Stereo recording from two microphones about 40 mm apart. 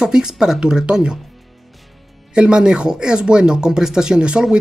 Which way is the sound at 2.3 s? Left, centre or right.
Right.